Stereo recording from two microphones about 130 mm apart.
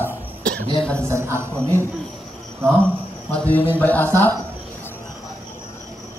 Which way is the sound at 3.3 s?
10° left (ahead or behind).